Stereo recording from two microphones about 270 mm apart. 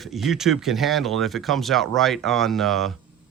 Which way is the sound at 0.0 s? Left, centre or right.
Centre.